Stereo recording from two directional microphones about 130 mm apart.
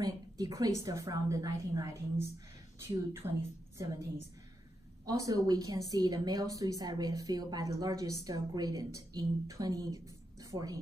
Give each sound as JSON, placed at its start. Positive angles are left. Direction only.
{"t": 0.0, "sound": "a woman's voice", "side_deg": -30}
{"t": 5.0, "sound": "a woman's voice", "side_deg": -30}